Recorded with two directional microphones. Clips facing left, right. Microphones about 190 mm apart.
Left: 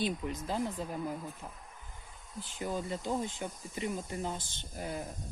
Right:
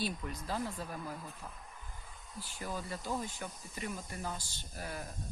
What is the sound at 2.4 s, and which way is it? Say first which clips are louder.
Speech: left 5 dB; 20° left (ahead or behind).